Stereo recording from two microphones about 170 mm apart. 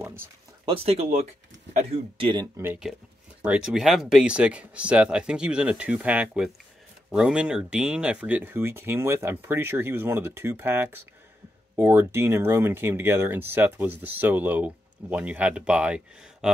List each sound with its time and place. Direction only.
0.0 s speech: 15° right (ahead or behind)
0.7 s speech: 35° right (ahead or behind)
2.5 s speech: 10° right (ahead or behind)